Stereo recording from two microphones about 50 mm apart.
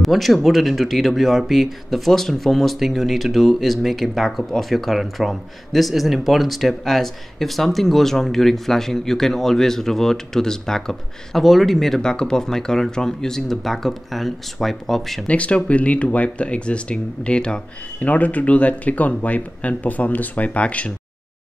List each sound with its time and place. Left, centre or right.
0.0 s speech: centre
12.0 s speech: centre
15.2 s speech: left
18.0 s speech: left